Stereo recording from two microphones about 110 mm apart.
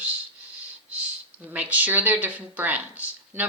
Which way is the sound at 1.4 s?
15° right (ahead or behind).